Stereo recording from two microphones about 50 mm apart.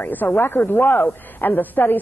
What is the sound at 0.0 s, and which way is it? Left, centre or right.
A woman's voice, left.